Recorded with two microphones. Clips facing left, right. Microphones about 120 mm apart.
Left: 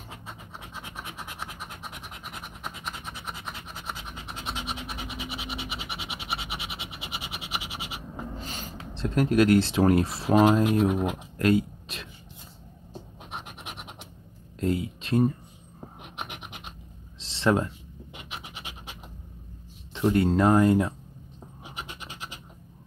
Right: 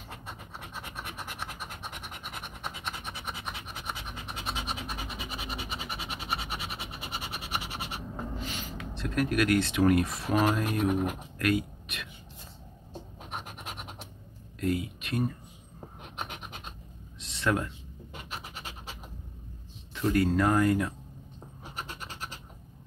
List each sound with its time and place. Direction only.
0.1 s scratch: centre (ahead or behind)
3.9 s scratch: 5° right (ahead or behind)
5.0 s scratch: 85° left
8.4 s speech: 40° left (ahead or behind)
11.3 s a sound: 30° left (ahead or behind)
14.6 s speech: 25° left (ahead or behind)
17.2 s a sound: 30° left (ahead or behind)
18.1 s scratch: 15° left (ahead or behind)
19.9 s speech: 25° left (ahead or behind)
21.6 s scratch: 15° left (ahead or behind)